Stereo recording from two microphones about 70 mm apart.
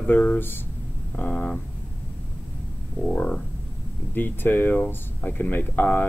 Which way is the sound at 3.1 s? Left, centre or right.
Centre.